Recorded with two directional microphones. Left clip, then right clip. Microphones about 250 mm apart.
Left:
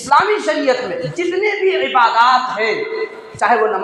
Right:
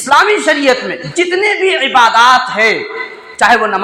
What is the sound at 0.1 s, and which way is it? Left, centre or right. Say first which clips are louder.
A man's voice: right 4 dB; right.